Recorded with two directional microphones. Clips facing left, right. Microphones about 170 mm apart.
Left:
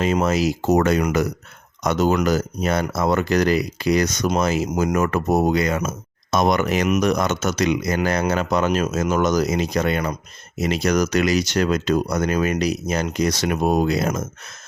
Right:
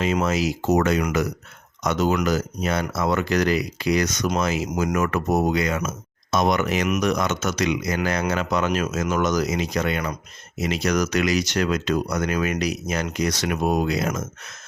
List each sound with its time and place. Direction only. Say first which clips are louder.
0.0 s speech: left 3 dB; 40° left (ahead or behind)